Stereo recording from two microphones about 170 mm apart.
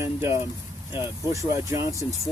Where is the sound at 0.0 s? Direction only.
15° right (ahead or behind).